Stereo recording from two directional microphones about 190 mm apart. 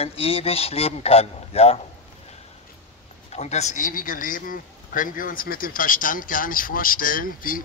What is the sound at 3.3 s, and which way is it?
Speech, 35° left (ahead or behind).